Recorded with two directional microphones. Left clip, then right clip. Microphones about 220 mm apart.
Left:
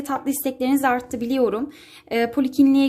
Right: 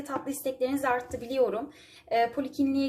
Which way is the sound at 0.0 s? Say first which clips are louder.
Left 8 dB; 50° left (ahead or behind).